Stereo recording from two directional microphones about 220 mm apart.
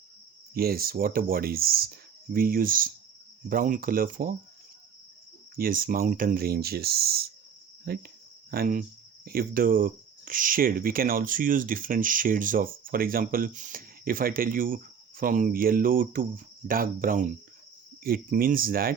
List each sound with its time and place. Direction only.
0.5 s speech: 45° right (ahead or behind)
5.5 s speech: 40° right (ahead or behind)
7.9 s cricket: 45° right (ahead or behind)
9.2 s speech: 40° right (ahead or behind)